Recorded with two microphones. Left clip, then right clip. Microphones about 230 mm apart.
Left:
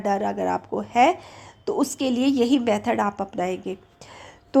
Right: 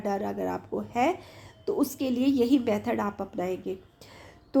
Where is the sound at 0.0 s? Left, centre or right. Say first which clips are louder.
Left 7 dB; left.